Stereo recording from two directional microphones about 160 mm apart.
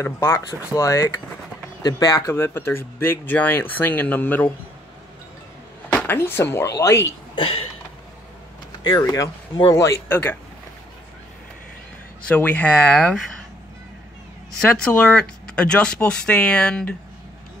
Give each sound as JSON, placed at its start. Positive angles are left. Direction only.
{"t": 0.0, "sound": "speech", "side_deg": 20}
{"t": 5.9, "sound": "speech", "side_deg": 15}
{"t": 7.3, "sound": "a sound", "side_deg": 35}
{"t": 8.8, "sound": "speech", "side_deg": 25}
{"t": 12.3, "sound": "speech", "side_deg": 10}
{"t": 14.6, "sound": "speech", "side_deg": 5}